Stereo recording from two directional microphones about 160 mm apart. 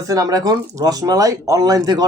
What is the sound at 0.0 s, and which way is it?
Speech, 20° right (ahead or behind).